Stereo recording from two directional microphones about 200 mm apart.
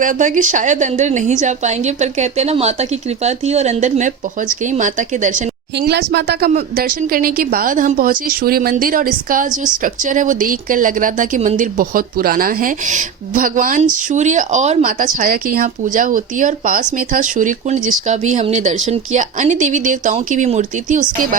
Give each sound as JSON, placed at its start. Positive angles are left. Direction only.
{"t": 0.0, "sound": "a woman's voice", "side_deg": -40}
{"t": 5.7, "sound": "a woman's voice", "side_deg": -55}